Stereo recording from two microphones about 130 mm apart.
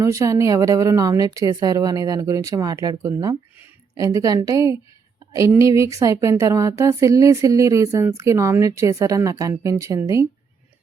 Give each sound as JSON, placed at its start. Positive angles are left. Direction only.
{"t": 0.0, "sound": "speech", "side_deg": -25}